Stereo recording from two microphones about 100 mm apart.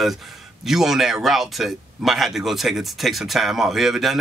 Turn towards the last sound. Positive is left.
turn(degrees=0)  # may be behind; listen again after turning